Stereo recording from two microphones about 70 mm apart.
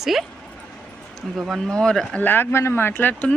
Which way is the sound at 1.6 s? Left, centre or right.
Centre.